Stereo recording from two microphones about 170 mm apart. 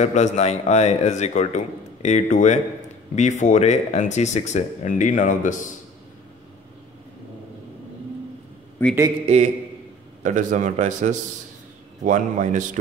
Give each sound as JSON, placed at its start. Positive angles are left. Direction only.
{"t": 0.0, "sound": "a man's voice", "side_deg": 45}
{"t": 8.8, "sound": "a man's voice", "side_deg": 10}
{"t": 9.2, "sound": "a man's voice", "side_deg": -40}